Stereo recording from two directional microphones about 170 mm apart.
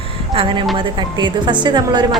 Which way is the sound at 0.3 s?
30° right (ahead or behind).